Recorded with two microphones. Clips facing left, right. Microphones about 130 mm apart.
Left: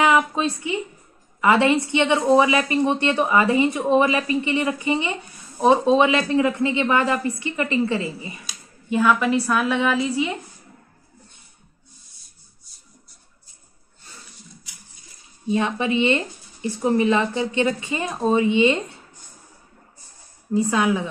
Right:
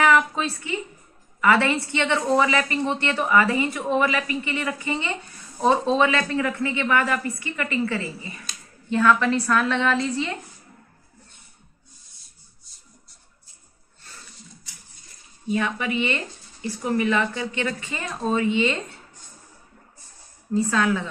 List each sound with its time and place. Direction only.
0.0 s a woman's voice: 20° left (ahead or behind)
8.5 s a woman's voice: 10° left (ahead or behind)
15.4 s a woman's voice: 25° left (ahead or behind)
20.5 s speech: 15° left (ahead or behind)